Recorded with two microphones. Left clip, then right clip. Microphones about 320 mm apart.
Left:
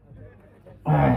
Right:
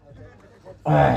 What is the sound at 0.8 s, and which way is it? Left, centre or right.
Speech, right.